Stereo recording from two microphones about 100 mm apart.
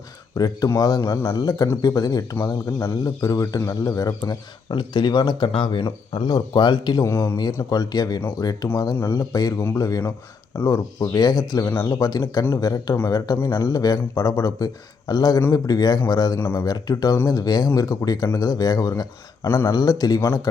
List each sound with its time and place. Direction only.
0.3 s a man's voice: 40° left (ahead or behind)
2.3 s speech: 20° left (ahead or behind)
3.2 s a man's voice: 35° left (ahead or behind)
4.7 s speech: 50° left (ahead or behind)
5.5 s speech: 55° left (ahead or behind)
7.0 s speech: 25° left (ahead or behind)
7.7 s a man's voice: 40° left (ahead or behind)
16.4 s speech: 20° left (ahead or behind)
16.6 s a man's voice: 40° left (ahead or behind)
19.5 s speech: 25° left (ahead or behind)
19.7 s a man's voice: 40° left (ahead or behind)